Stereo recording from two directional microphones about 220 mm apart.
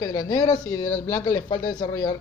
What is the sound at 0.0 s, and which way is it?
Speech, 20° left (ahead or behind).